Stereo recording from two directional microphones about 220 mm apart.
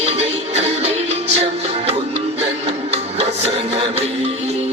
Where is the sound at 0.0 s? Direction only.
30° right (ahead or behind).